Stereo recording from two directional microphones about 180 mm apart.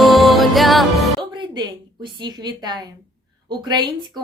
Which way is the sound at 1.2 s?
25° right (ahead or behind).